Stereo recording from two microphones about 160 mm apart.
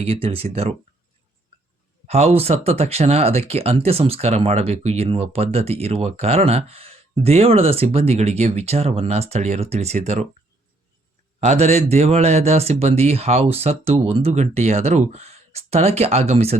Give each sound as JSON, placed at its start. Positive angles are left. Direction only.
{"t": 0.0, "sound": "speech", "side_deg": -35}
{"t": 2.0, "sound": "speech", "side_deg": -40}
{"t": 11.3, "sound": "speech", "side_deg": -45}